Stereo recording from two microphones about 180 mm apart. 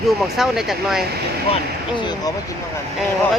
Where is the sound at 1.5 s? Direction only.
25° left (ahead or behind).